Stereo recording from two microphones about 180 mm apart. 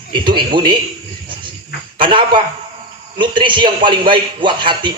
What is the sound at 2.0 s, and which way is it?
A man's voice, 25° right (ahead or behind).